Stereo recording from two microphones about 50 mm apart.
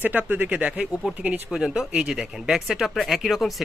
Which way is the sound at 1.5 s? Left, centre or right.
Centre.